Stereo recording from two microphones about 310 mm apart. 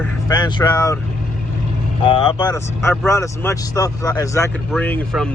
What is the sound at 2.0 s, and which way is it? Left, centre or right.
Speech, centre.